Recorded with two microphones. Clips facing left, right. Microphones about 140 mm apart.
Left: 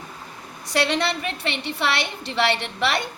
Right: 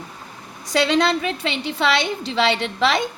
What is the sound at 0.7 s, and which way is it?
Speech, 90° right.